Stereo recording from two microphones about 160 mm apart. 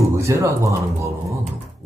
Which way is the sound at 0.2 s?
20° right (ahead or behind).